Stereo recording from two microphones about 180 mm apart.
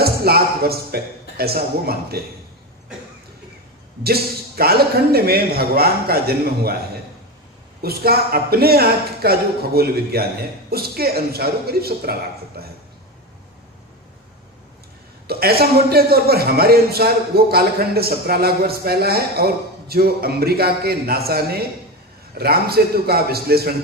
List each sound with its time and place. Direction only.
0.0 s speech: 60° right (ahead or behind)
4.0 s a man's voice: 60° right (ahead or behind)
7.8 s a man's voice: 60° right (ahead or behind)
15.3 s a man's voice: 60° right (ahead or behind)